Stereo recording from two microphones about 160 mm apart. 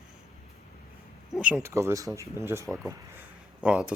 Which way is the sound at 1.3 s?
10° right (ahead or behind).